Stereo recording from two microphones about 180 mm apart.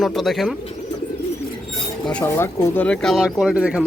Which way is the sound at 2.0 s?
10° left (ahead or behind).